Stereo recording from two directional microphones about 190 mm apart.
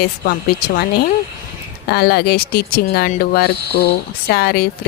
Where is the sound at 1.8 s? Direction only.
55° left (ahead or behind).